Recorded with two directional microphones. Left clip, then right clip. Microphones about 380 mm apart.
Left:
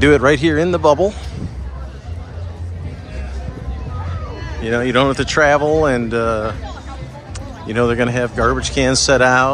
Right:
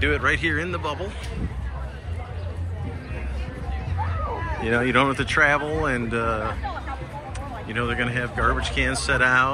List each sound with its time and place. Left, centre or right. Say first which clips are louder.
0.2 s speech: left 9 dB; centre
4.6 s speech: left 5 dB; centre
7.6 s speech: left 9 dB; centre